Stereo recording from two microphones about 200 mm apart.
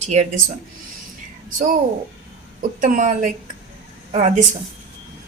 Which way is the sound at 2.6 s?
40° right (ahead or behind).